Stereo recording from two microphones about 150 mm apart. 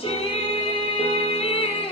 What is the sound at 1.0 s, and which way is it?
Music, 40° left (ahead or behind).